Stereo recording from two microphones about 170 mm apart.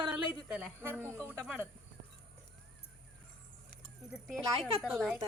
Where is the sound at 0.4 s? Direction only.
10° right (ahead or behind).